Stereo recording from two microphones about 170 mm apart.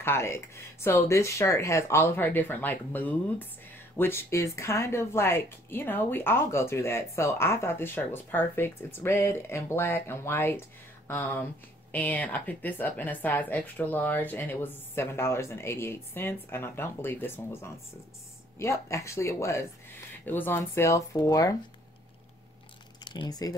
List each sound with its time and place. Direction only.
0.0 s speech: 15° left (ahead or behind)
23.0 s speech: 25° left (ahead or behind)